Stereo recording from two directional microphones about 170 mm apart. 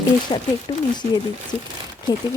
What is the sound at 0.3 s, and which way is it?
Speech, 25° left (ahead or behind).